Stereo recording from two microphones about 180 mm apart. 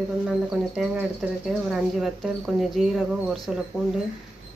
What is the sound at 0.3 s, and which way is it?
Speech, 5° right (ahead or behind).